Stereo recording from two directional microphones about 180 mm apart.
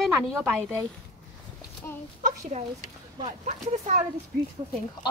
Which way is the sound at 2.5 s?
40° right (ahead or behind).